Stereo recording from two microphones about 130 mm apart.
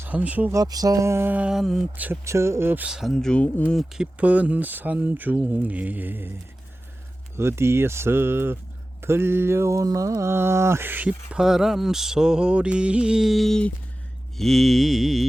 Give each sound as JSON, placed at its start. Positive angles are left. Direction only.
{"t": 0.0, "sound": "speech", "side_deg": -10}
{"t": 0.5, "sound": "mantra", "side_deg": -30}
{"t": 2.2, "sound": "mantra", "side_deg": -20}
{"t": 7.3, "sound": "speech", "side_deg": -20}
{"t": 9.0, "sound": "mantra", "side_deg": -20}
{"t": 14.3, "sound": "music", "side_deg": 0}